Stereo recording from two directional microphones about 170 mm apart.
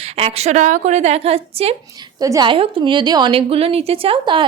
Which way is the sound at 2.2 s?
20° right (ahead or behind).